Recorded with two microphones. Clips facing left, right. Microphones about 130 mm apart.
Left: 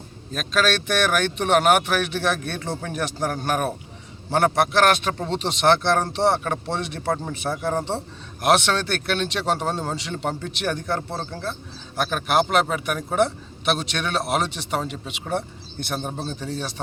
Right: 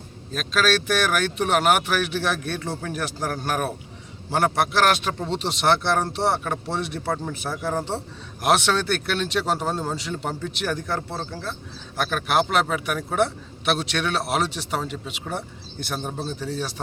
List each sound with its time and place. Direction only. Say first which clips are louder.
0.3 s speech: even; centre (ahead or behind)
7.0 s a man's voice: left 2 dB; 15° left (ahead or behind)
8.4 s speech: left 1 dB; 5° right (ahead or behind)